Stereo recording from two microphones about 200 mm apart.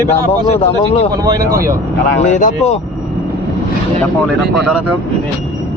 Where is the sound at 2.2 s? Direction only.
35° left (ahead or behind).